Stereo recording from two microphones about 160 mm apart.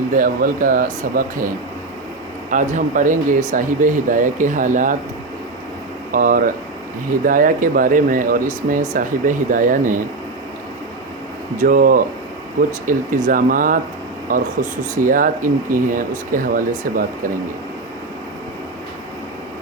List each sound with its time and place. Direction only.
0.2 s speech: 60° right (ahead or behind)
2.5 s speech: 50° right (ahead or behind)
6.1 s speech: 60° right (ahead or behind)
11.5 s speech: 60° right (ahead or behind)